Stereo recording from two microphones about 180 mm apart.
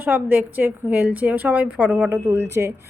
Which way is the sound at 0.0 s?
10° right (ahead or behind).